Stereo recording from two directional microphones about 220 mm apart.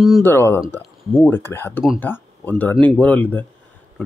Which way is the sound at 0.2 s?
10° left (ahead or behind).